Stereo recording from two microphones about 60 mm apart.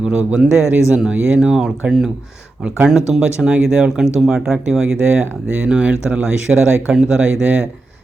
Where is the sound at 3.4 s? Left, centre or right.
Centre.